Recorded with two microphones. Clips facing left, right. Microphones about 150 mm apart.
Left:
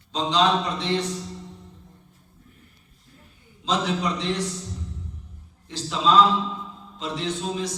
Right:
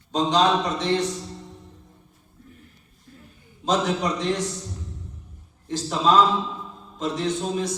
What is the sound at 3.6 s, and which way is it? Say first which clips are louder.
Speech: right 2 dB; 45° right (ahead or behind).